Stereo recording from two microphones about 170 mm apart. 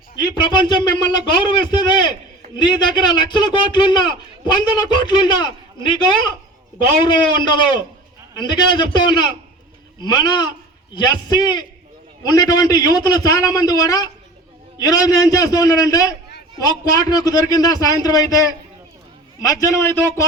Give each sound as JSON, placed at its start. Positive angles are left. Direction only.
{"t": 0.2, "sound": "a man's voice", "side_deg": 25}
{"t": 19.5, "sound": "a man's voice", "side_deg": 20}